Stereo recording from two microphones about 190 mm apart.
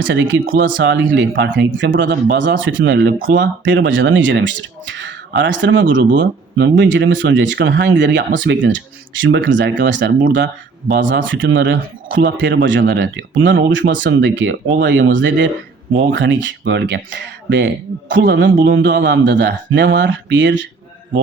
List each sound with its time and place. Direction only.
0.1 s speech: 85° right
3.2 s speech: 85° right
6.1 s speech: 70° right (ahead or behind)